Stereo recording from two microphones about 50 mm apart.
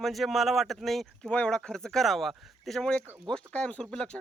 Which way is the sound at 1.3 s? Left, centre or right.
Centre.